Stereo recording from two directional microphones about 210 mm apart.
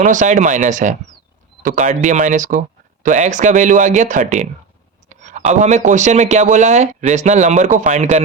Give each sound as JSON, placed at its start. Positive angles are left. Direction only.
{"t": 0.0, "sound": "speech", "side_deg": -35}